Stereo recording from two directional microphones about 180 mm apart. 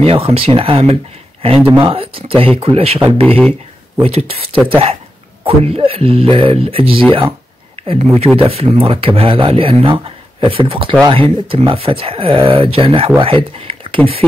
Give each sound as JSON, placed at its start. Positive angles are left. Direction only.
{"t": 0.0, "sound": "speech", "side_deg": -35}
{"t": 3.3, "sound": "speech", "side_deg": 5}
{"t": 4.0, "sound": "speech", "side_deg": -30}